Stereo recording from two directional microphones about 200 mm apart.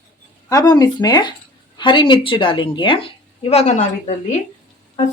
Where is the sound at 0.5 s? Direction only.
20° left (ahead or behind).